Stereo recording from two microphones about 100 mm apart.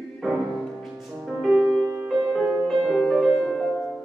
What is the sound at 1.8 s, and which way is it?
Music, 25° right (ahead or behind).